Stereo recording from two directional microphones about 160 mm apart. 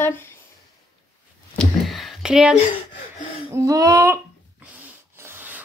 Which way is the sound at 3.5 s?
20° right (ahead or behind).